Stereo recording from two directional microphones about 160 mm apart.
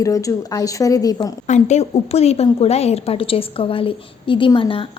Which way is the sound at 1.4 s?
45° left (ahead or behind).